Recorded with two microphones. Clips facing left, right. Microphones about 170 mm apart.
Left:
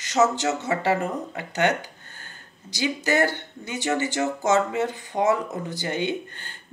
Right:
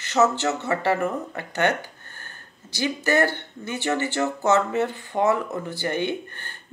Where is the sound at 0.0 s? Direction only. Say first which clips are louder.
Right 1 dB; 15° left (ahead or behind).